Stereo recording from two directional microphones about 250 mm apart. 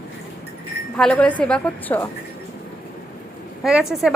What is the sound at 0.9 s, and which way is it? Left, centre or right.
A woman's voice, centre.